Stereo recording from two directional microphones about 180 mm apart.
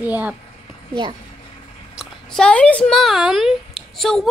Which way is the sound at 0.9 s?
25° right (ahead or behind).